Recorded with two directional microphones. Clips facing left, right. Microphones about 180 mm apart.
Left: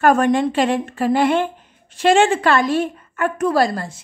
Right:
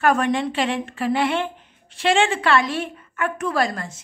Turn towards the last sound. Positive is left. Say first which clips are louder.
# left 5 dB
turn(degrees=35)  # may be behind; listen again after turning